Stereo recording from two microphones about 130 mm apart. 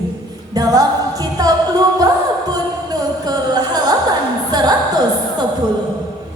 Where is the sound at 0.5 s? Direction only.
30° right (ahead or behind).